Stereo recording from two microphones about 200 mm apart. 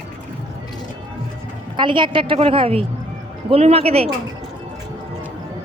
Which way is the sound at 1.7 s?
25° right (ahead or behind).